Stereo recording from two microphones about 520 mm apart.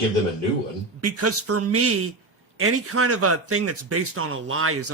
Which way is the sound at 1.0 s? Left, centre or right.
Right.